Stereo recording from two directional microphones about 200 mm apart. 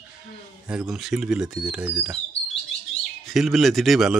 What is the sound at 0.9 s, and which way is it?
Speech, 5° right (ahead or behind).